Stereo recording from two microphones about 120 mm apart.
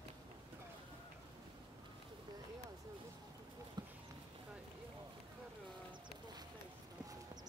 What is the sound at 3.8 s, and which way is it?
Clip-clop, 35° right (ahead or behind).